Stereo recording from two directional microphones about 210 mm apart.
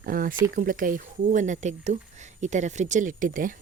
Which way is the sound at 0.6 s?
40° right (ahead or behind).